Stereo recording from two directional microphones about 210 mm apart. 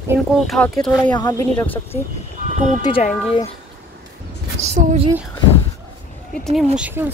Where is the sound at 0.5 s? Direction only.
Centre (ahead or behind).